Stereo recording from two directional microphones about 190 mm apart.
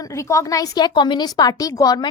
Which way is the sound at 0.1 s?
15° left (ahead or behind).